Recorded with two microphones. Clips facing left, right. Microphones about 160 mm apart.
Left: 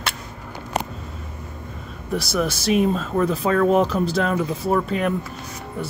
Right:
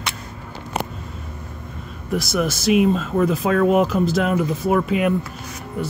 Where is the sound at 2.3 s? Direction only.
5° right (ahead or behind).